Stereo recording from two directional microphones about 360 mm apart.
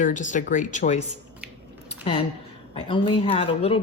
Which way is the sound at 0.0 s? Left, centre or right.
Left.